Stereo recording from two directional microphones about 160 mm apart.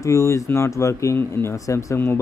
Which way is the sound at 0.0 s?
20° left (ahead or behind).